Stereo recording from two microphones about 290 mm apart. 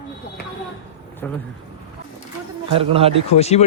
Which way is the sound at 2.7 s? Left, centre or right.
Centre.